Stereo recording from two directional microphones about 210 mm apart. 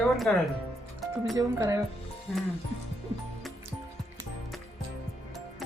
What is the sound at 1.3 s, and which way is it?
Speech, 15° right (ahead or behind).